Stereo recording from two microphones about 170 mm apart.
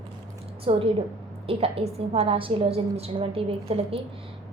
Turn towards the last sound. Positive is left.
turn(degrees=-35)  # may be behind; listen again after turning